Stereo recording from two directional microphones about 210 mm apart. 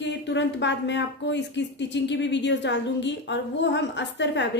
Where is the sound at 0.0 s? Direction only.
55° left (ahead or behind).